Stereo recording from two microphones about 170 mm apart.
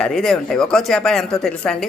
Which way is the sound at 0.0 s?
Centre (ahead or behind).